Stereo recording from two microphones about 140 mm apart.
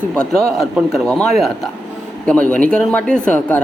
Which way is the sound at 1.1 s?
5° left (ahead or behind).